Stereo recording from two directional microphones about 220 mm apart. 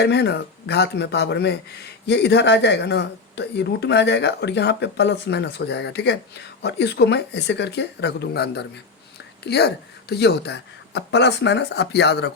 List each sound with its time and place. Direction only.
0.0 s speech: 50° left (ahead or behind)